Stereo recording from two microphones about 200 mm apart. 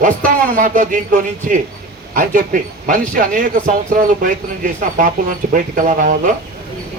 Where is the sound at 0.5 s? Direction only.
40° right (ahead or behind).